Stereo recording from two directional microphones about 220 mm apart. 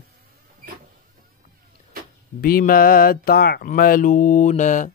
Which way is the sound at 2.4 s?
40° left (ahead or behind).